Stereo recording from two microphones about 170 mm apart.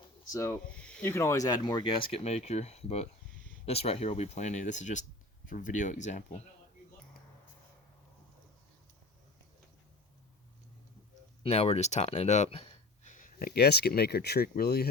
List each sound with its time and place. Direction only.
0.3 s speech: 15° left (ahead or behind)
0.7 s speech: 5° left (ahead or behind); by 6.4 s 45° left (ahead or behind)
11.4 s speech: 40° left (ahead or behind); by 14.8 s 70° left (ahead or behind)